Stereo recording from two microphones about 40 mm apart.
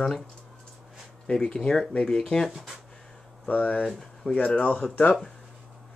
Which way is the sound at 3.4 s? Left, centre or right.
Left.